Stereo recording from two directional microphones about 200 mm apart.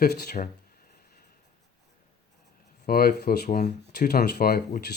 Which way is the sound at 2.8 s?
50° left (ahead or behind).